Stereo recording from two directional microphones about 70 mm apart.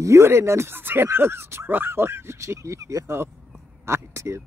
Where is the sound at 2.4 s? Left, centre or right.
Right.